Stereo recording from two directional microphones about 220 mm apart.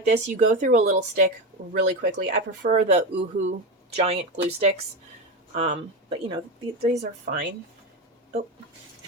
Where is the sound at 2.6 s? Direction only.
35° right (ahead or behind).